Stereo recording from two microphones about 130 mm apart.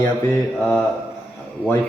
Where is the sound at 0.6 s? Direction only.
Centre (ahead or behind).